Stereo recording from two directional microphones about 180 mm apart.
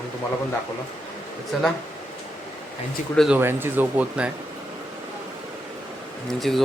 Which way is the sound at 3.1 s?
Centre (ahead or behind).